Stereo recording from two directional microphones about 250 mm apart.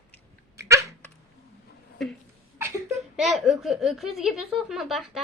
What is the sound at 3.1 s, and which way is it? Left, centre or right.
A woman's voice, centre.